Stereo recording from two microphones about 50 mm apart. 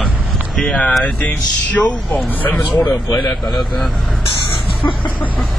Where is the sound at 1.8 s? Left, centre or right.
Left.